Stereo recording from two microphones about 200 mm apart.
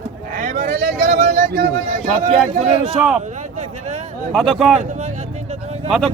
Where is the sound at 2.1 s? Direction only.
25° right (ahead or behind).